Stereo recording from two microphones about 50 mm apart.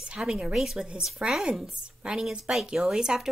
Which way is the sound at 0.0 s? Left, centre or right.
Centre.